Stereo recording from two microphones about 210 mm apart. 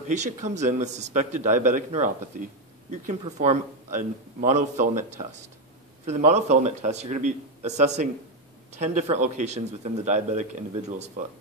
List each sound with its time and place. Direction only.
0.1 s a man's voice: 35° right (ahead or behind)